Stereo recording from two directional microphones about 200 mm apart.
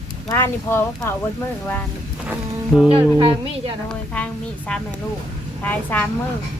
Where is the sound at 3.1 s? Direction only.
25° right (ahead or behind).